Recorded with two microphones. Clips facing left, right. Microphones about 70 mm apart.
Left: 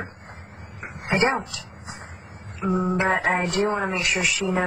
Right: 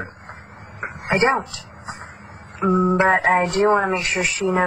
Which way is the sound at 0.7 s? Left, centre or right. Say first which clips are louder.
Right 6 dB; right.